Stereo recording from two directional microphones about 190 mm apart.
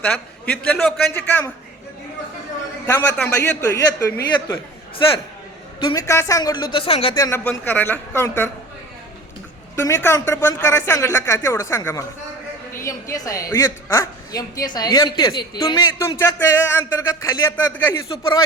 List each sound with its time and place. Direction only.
0.0 s a man's voice: 5° left (ahead or behind)
2.8 s speech: 10° left (ahead or behind)
5.8 s a woman's voice: 20° left (ahead or behind)
7.2 s speech: 15° left (ahead or behind)
9.7 s a woman's voice: 15° left (ahead or behind)